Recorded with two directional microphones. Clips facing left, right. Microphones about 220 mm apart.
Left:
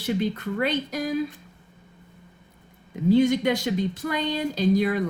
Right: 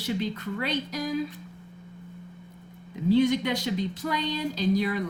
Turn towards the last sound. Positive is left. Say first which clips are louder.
# left 4 dB
turn(degrees=50)  # may be behind; listen again after turning